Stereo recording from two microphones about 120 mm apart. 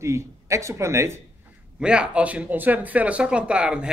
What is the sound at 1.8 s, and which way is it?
A man's voice, 10° right (ahead or behind).